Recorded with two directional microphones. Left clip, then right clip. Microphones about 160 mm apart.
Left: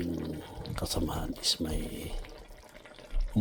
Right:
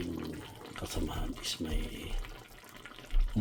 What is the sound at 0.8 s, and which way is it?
Speech, 35° left (ahead or behind).